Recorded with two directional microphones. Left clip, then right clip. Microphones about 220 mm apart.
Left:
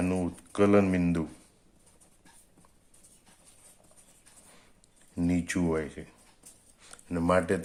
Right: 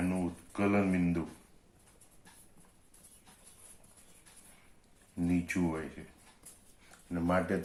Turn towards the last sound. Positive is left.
turn(degrees=45)  # may be behind; listen again after turning